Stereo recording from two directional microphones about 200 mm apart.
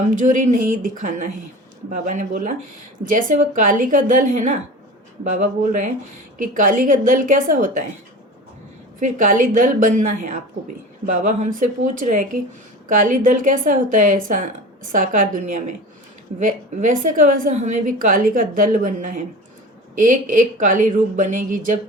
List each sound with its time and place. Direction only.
0.2 s a woman's voice: 40° right (ahead or behind)
9.0 s a woman's voice: 40° right (ahead or behind)